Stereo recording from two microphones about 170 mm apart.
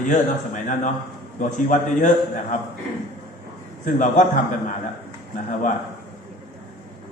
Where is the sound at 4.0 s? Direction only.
45° left (ahead or behind).